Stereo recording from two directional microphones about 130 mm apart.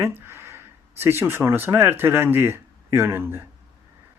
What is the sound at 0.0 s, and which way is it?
Speech, 20° right (ahead or behind).